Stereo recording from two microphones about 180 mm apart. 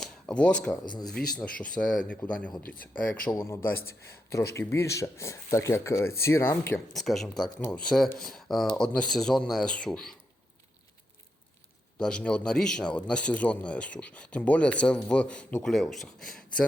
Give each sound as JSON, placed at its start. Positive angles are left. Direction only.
{"t": 0.0, "sound": "a sound", "side_deg": 5}
{"t": 1.0, "sound": "a man's voice", "side_deg": 5}
{"t": 3.2, "sound": "speech", "side_deg": 15}
{"t": 6.9, "sound": "a man's voice", "side_deg": 0}
{"t": 11.9, "sound": "a man's voice", "side_deg": 5}